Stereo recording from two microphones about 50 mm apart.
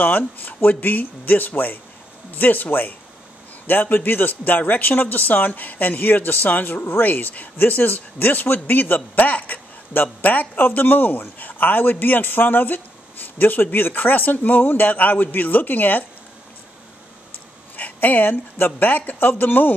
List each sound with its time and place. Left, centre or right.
0.0 s a man's voice: left
9.1 s a sound: left
10.2 s a man's voice: left
17.7 s a man's voice: left